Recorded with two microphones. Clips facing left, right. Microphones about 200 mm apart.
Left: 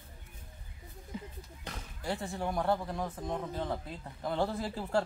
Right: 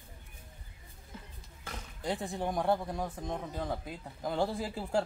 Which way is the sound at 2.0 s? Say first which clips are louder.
Right 1 dB; 15° right (ahead or behind).